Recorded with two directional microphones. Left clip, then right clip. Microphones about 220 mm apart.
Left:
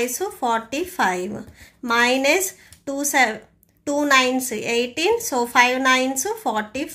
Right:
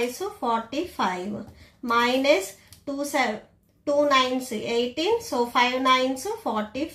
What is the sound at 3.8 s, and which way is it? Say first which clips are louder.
A woman's voice: left 3 dB; 40° left (ahead or behind).